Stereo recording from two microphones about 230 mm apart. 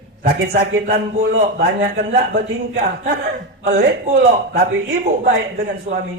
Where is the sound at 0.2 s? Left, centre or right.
Right.